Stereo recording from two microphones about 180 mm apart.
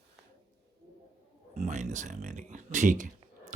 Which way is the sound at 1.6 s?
40° right (ahead or behind).